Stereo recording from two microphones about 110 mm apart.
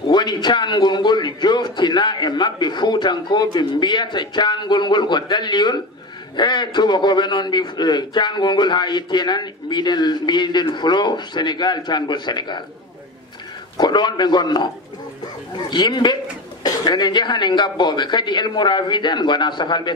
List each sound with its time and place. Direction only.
0.1 s a man's voice: 40° left (ahead or behind)
13.7 s a man's voice: 40° left (ahead or behind)